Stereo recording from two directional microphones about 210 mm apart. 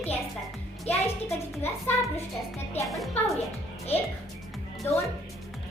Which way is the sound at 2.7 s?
Centre (ahead or behind).